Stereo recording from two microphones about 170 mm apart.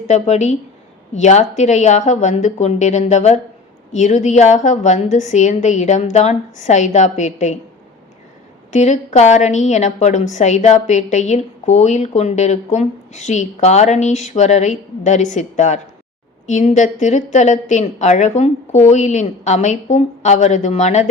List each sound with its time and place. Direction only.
0.1 s a woman's voice: 40° left (ahead or behind)
8.7 s a woman's voice: 45° left (ahead or behind)